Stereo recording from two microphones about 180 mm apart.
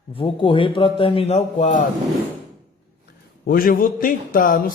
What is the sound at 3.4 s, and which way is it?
A man's voice, 55° left (ahead or behind).